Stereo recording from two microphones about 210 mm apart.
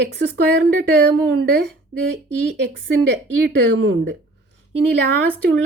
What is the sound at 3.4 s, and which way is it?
Speech, 60° right (ahead or behind).